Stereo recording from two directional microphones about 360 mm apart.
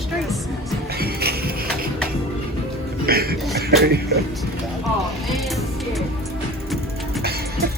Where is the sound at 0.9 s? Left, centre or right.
Right.